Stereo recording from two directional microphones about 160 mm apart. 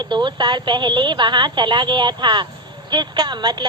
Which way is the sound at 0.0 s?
30° right (ahead or behind).